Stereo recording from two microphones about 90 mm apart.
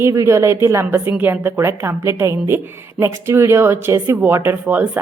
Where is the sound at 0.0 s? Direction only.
35° right (ahead or behind).